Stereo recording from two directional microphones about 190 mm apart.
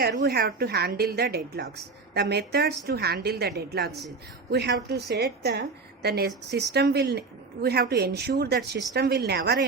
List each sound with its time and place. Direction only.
0.0 s a woman's voice: 55° right (ahead or behind)